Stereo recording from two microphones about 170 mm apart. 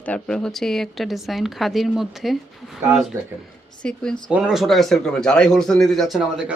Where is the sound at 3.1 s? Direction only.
15° right (ahead or behind).